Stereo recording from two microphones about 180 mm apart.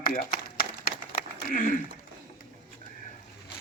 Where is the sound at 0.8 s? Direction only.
50° left (ahead or behind).